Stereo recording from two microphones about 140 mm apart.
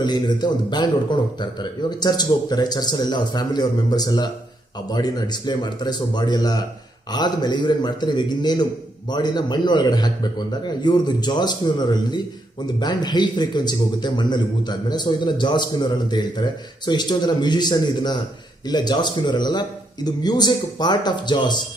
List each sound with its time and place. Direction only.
0.0 s a man's voice: 30° left (ahead or behind)